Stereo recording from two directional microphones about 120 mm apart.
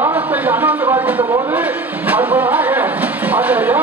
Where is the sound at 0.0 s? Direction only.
20° right (ahead or behind).